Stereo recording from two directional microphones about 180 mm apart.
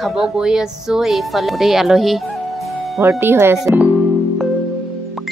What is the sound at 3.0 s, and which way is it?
Speech, 15° right (ahead or behind).